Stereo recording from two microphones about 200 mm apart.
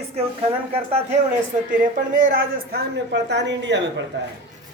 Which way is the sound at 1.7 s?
40° right (ahead or behind).